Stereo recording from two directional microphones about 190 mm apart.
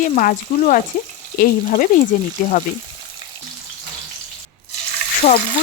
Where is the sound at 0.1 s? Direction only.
40° left (ahead or behind).